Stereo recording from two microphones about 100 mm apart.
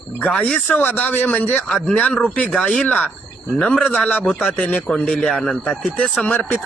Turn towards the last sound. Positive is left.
turn(degrees=15)  # may be behind; listen again after turning